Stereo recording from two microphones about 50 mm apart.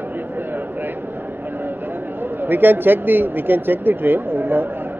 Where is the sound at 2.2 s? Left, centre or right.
Right.